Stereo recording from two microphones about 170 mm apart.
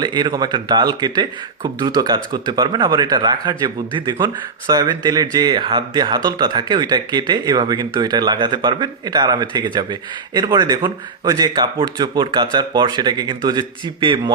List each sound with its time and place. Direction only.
0.0 s speech: 25° right (ahead or behind)